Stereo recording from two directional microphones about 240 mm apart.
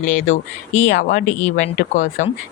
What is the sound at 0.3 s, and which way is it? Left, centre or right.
Speech, left.